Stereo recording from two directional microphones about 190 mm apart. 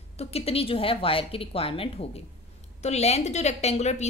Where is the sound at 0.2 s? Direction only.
30° left (ahead or behind).